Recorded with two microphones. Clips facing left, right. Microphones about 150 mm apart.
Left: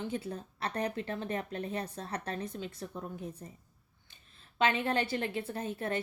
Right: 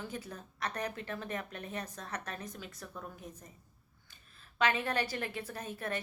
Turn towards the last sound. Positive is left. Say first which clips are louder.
# left 4 dB
turn(degrees=25)  # may be behind; listen again after turning